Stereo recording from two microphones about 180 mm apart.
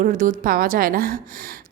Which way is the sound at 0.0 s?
45° right (ahead or behind).